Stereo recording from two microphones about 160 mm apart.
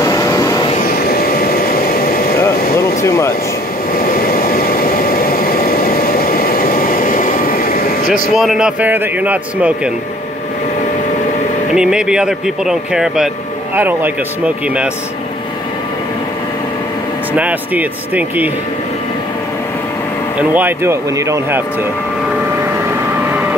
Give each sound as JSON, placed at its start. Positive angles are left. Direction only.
{"t": 0.0, "sound": "vehicle", "side_deg": 20}
{"t": 0.7, "sound": "vehicle", "side_deg": 70}
{"t": 2.7, "sound": "a sound", "side_deg": 15}
{"t": 3.9, "sound": "vehicle", "side_deg": 65}
{"t": 8.1, "sound": "a man's voice", "side_deg": 0}
{"t": 11.7, "sound": "a man's voice", "side_deg": -5}
{"t": 17.3, "sound": "a man's voice", "side_deg": -10}
{"t": 20.3, "sound": "a man's voice", "side_deg": -10}
{"t": 23.1, "sound": "a sound", "side_deg": -10}